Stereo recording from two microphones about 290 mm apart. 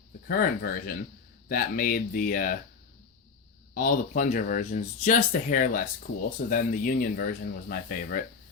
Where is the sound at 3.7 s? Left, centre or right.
Left.